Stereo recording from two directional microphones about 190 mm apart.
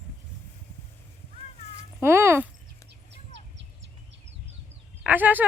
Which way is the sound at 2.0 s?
15° right (ahead or behind).